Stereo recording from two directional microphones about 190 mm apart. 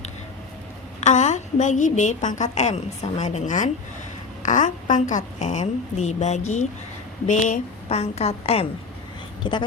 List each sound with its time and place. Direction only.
1.0 s a woman's voice: 40° left (ahead or behind)